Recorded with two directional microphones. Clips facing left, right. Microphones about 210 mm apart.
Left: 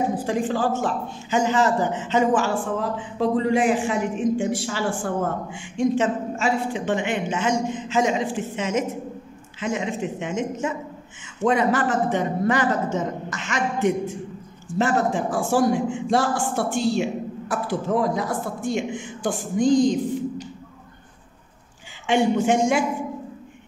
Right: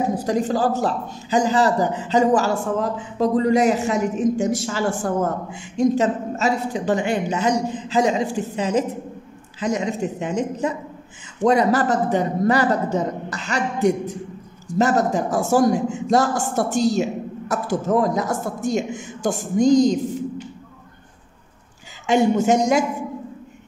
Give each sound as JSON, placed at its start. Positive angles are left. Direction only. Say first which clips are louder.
{"t": 0.2, "sound": "a man's voice", "louder": "right 3 dB", "side_deg": -40}
{"t": 22.0, "sound": "a man's voice", "louder": "right 2 dB", "side_deg": -40}